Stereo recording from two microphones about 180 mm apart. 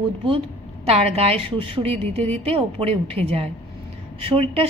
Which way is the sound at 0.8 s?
35° right (ahead or behind).